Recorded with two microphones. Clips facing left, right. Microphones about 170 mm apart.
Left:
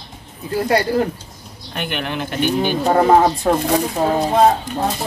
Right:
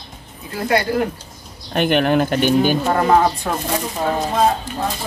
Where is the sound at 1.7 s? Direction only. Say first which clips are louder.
Right 9 dB; 45° right (ahead or behind).